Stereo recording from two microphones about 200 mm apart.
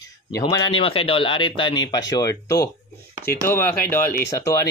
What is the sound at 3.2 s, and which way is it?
Speech, 50° left (ahead or behind).